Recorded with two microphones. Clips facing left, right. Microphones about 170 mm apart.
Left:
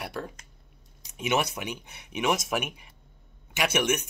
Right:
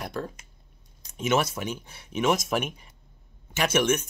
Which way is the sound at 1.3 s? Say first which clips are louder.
Right 2 dB; 15° left (ahead or behind).